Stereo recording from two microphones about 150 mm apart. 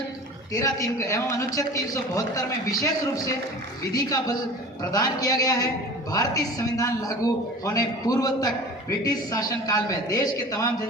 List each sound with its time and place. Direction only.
0.5 s a man's voice: 20° left (ahead or behind)
3.9 s a man's voice: 25° left (ahead or behind)